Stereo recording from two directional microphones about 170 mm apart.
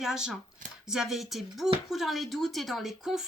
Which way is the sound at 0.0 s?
5° right (ahead or behind).